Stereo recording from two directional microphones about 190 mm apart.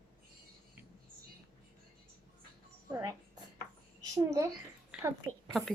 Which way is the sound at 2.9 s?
15° right (ahead or behind).